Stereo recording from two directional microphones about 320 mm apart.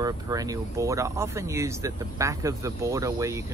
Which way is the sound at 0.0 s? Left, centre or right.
Centre.